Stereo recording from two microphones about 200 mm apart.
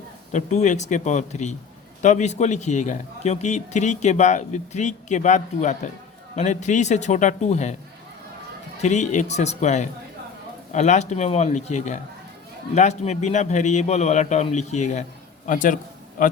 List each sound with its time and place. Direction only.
0.3 s a man's voice: 35° left (ahead or behind)
8.8 s a man's voice: 35° left (ahead or behind)